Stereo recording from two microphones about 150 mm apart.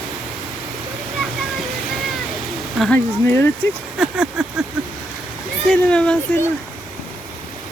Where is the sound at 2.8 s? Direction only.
10° left (ahead or behind).